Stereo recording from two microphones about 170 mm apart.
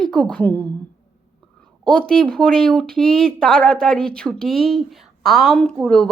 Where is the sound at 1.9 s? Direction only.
5° left (ahead or behind).